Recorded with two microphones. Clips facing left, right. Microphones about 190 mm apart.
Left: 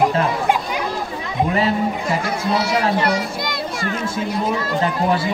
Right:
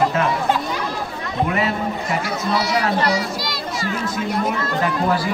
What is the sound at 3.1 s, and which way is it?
Music, 55° left (ahead or behind).